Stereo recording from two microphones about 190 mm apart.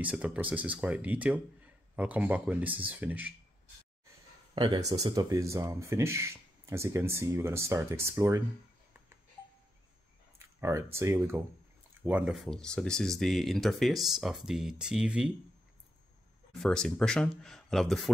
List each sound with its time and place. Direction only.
0.0 s speech: 10° right (ahead or behind)
4.6 s speech: 25° right (ahead or behind)
10.4 s speech: 15° right (ahead or behind)
16.5 s speech: 5° left (ahead or behind)